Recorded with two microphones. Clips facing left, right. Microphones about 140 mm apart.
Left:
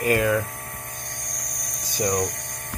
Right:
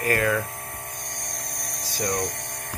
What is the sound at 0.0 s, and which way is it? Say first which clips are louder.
Speech: left 3 dB; 20° left (ahead or behind).